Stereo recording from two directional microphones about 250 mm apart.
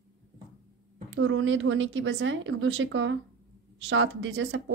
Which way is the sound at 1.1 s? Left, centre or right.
Right.